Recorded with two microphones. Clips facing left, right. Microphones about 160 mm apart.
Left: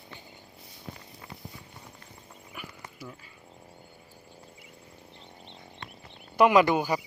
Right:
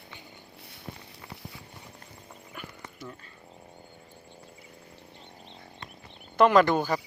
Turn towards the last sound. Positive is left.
turn(degrees=10)  # may be behind; listen again after turning